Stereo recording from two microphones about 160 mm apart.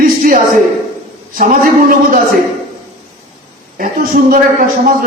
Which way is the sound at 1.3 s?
60° right (ahead or behind).